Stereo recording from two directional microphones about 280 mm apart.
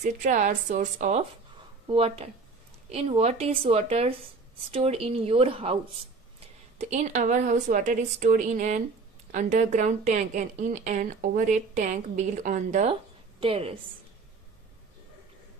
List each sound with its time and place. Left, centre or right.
0.0 s speech: right
6.8 s a woman's voice: right